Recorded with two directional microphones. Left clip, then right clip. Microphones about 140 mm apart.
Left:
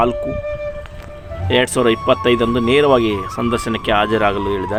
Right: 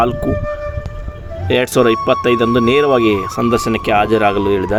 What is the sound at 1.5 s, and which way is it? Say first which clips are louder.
Speech: right 2 dB; 25° right (ahead or behind).